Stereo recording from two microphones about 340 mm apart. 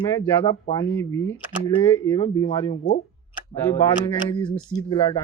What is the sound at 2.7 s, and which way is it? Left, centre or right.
Speech, left.